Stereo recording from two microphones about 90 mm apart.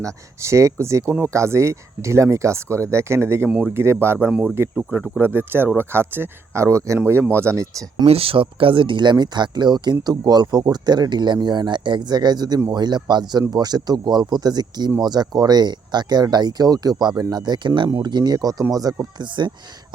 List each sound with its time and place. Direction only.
0.0 s speech: 35° right (ahead or behind)
4.7 s speech: 15° right (ahead or behind); by 7.7 s 30° right (ahead or behind)
8.0 s speech: 90° right; by 19.6 s 45° right (ahead or behind)